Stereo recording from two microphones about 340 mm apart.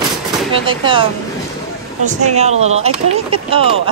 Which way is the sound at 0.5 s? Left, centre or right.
Centre.